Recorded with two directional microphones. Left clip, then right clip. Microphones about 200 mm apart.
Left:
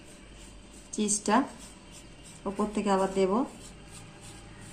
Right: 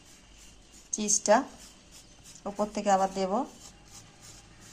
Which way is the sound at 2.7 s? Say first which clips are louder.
Right 1 dB; 50° right (ahead or behind).